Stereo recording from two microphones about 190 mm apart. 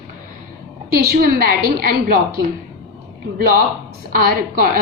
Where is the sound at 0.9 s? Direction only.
55° right (ahead or behind).